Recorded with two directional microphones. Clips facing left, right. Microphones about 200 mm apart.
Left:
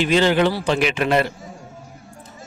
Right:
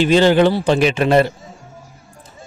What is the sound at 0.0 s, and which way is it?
A man's voice, 35° right (ahead or behind).